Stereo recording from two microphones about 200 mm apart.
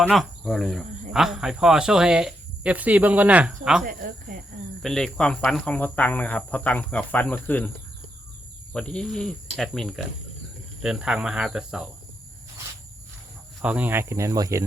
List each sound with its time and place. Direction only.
0.1 s speech: centre (ahead or behind)
4.3 s speech: 40° right (ahead or behind)
4.8 s speech: centre (ahead or behind)
8.7 s speech: 5° left (ahead or behind)
13.6 s speech: 5° right (ahead or behind)